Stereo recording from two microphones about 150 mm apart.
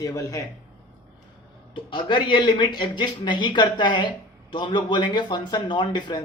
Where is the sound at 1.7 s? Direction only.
30° left (ahead or behind).